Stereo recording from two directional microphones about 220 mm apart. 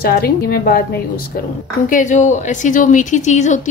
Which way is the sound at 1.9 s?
35° left (ahead or behind).